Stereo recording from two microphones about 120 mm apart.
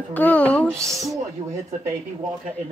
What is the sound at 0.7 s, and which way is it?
Speech, 25° right (ahead or behind).